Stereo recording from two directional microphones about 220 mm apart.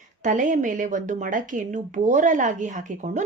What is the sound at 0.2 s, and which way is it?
Speech, 35° right (ahead or behind).